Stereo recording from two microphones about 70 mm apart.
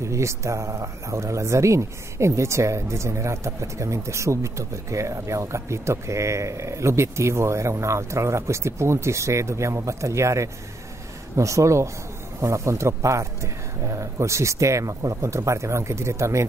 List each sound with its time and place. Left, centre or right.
0.0 s speech: right